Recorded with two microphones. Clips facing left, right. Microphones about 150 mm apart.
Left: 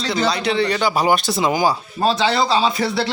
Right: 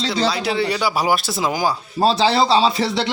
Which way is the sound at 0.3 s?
5° right (ahead or behind).